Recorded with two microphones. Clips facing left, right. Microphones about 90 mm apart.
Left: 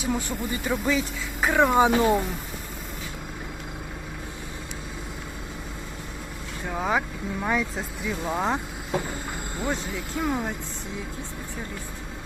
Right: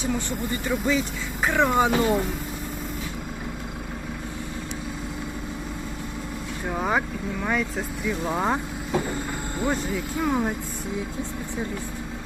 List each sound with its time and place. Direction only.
0.1 s speech: 10° left (ahead or behind)
6.7 s speech: 5° right (ahead or behind)
9.6 s speech: centre (ahead or behind)